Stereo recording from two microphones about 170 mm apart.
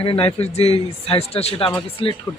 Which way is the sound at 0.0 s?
35° left (ahead or behind).